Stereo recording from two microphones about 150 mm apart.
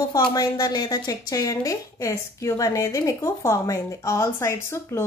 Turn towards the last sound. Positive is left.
turn(degrees=15)  # may be behind; listen again after turning